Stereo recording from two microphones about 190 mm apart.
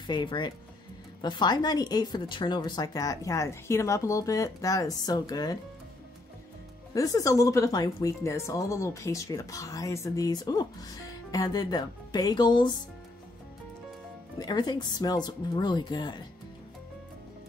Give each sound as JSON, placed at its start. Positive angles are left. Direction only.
{"t": 0.0, "sound": "a woman's voice", "side_deg": 25}
{"t": 6.9, "sound": "speech", "side_deg": 20}
{"t": 14.4, "sound": "a woman's voice", "side_deg": 20}